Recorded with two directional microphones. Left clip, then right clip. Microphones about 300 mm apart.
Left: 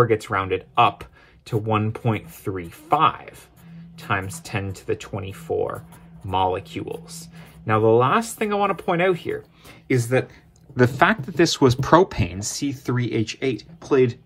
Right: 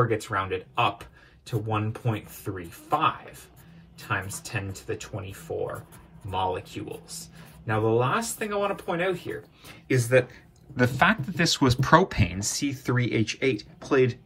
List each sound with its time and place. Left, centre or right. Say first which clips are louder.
0.0 s speech: left 6 dB; centre
6.3 s speech: left 6 dB; centre